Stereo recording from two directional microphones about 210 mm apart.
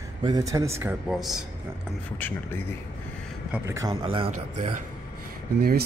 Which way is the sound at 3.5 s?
15° right (ahead or behind).